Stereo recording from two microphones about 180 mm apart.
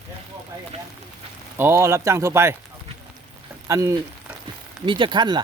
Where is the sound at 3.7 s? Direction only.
15° right (ahead or behind).